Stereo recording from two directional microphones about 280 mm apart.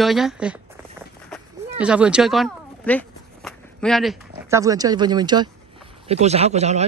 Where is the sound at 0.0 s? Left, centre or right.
Centre.